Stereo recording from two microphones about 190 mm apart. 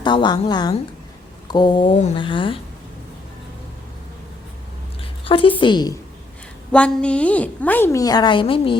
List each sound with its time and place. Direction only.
0.0 s speech: 25° left (ahead or behind)
5.2 s speech: 30° left (ahead or behind)
6.7 s a woman's voice: 5° left (ahead or behind); by 8.7 s 30° left (ahead or behind)